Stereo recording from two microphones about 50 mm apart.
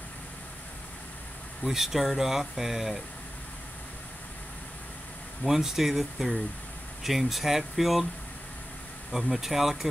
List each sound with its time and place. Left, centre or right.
1.6 s speech: centre
5.4 s speech: centre
9.1 s speech: centre